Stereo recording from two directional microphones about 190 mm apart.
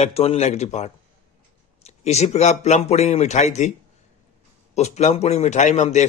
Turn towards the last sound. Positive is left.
turn(degrees=35)  # may be behind; listen again after turning